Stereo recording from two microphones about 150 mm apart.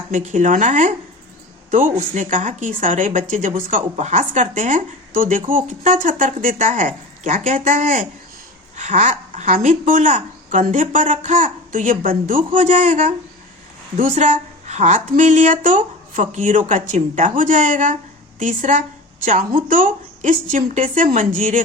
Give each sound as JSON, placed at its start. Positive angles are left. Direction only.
{"t": 0.1, "sound": "a woman's voice", "side_deg": -55}
{"t": 2.0, "sound": "a woman's voice", "side_deg": -55}